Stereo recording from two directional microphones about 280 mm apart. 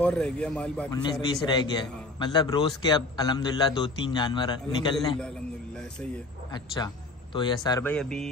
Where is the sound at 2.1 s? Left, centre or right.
Centre.